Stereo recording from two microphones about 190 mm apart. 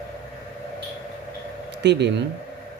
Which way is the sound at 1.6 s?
65° right (ahead or behind).